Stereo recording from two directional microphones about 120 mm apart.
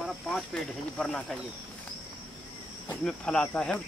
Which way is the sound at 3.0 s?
10° left (ahead or behind).